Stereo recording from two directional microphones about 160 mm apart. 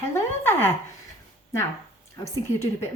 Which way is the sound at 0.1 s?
15° left (ahead or behind).